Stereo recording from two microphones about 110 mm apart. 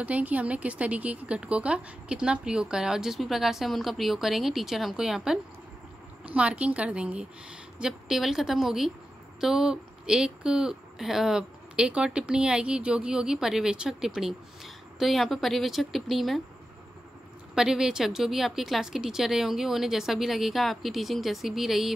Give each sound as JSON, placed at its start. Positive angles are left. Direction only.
{"t": 0.0, "sound": "speech", "side_deg": -15}
{"t": 17.6, "sound": "speech", "side_deg": -5}